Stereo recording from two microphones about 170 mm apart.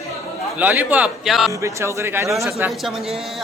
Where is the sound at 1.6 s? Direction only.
15° right (ahead or behind).